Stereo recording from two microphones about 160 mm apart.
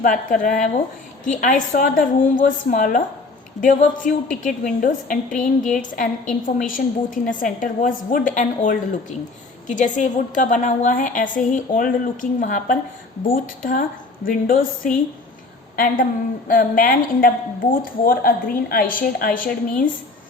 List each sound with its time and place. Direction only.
0.0 s a woman's voice: 55° left (ahead or behind)
15.7 s a woman's voice: 60° left (ahead or behind)